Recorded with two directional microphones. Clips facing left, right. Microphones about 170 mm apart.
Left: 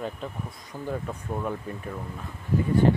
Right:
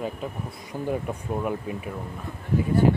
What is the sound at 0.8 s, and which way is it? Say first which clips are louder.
Speech: right 3 dB; 15° right (ahead or behind).